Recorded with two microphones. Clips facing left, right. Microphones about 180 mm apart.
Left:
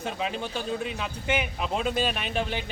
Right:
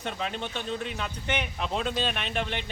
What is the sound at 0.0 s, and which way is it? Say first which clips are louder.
Speech: left 2 dB; 5° left (ahead or behind).